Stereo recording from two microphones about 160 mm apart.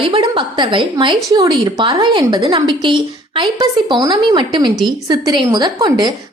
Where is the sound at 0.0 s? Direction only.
35° right (ahead or behind).